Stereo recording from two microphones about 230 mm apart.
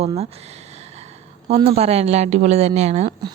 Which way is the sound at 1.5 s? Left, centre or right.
Right.